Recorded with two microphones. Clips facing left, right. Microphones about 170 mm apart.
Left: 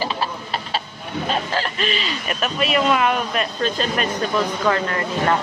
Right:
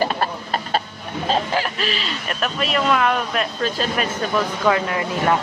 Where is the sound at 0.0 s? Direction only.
50° right (ahead or behind).